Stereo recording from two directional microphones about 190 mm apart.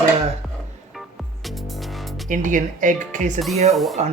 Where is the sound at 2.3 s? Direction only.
45° right (ahead or behind).